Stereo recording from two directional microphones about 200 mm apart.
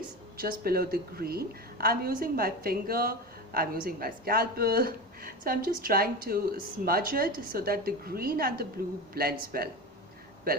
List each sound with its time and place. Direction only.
0.3 s a woman's voice: 50° right (ahead or behind)